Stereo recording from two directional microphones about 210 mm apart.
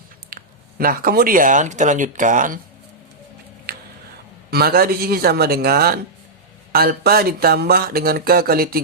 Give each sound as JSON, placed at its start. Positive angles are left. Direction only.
{"t": 0.3, "sound": "speech", "side_deg": -45}
{"t": 4.5, "sound": "speech", "side_deg": -45}